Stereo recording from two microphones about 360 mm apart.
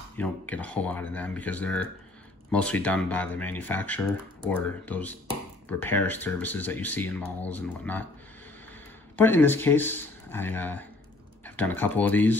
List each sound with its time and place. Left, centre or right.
0.2 s speech: centre
9.1 s speech: centre